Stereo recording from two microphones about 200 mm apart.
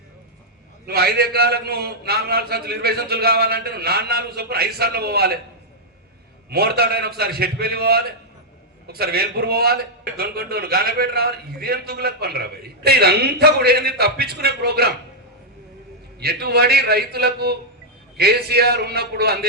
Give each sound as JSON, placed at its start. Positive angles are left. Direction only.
{"t": 0.9, "sound": "a man's voice", "side_deg": -50}
{"t": 6.5, "sound": "a man's voice", "side_deg": -50}
{"t": 16.2, "sound": "a man's voice", "side_deg": -50}